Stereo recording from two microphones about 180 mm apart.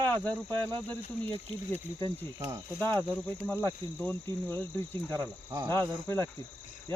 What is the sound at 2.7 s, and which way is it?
Cricket, 10° left (ahead or behind).